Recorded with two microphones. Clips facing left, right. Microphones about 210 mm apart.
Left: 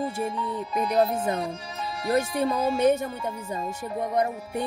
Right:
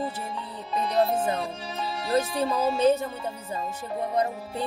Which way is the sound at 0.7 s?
25° right (ahead or behind).